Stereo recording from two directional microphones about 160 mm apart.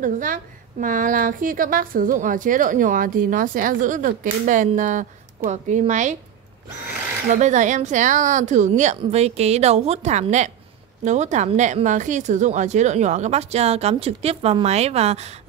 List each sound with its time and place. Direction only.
0.0 s a woman's voice: 55° right (ahead or behind)
7.2 s a woman's voice: 50° right (ahead or behind)